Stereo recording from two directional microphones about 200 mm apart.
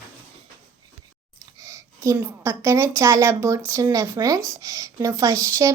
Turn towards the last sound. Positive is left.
turn(degrees=-15)  # may be behind; listen again after turning